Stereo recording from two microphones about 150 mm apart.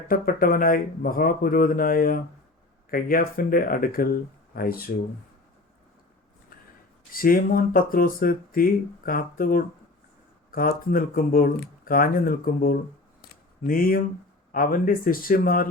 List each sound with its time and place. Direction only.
0.1 s speech: 70° left (ahead or behind)
7.1 s speech: 70° left (ahead or behind)